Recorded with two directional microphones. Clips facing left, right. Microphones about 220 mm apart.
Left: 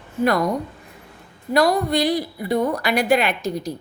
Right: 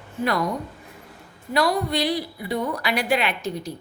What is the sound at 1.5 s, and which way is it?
A woman's voice, 45° left (ahead or behind).